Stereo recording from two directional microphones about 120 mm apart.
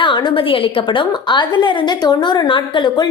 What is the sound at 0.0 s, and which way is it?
A woman's voice, 40° left (ahead or behind).